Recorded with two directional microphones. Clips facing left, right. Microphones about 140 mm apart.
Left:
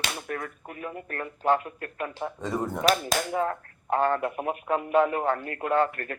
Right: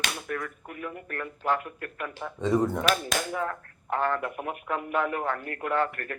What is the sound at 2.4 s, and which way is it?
Speech, 5° left (ahead or behind).